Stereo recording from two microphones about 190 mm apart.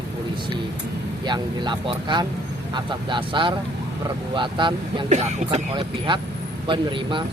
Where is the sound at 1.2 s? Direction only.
25° right (ahead or behind).